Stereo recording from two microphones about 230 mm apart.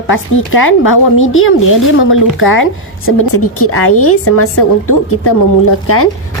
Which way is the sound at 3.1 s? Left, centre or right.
Left.